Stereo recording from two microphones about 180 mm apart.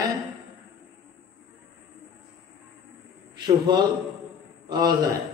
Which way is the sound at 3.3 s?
25° right (ahead or behind).